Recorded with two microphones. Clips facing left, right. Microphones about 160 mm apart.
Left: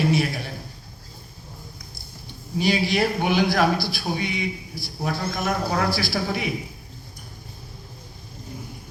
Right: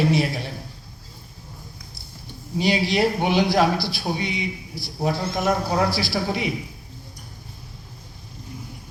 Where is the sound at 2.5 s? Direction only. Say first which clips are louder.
Right 1 dB; 30° right (ahead or behind).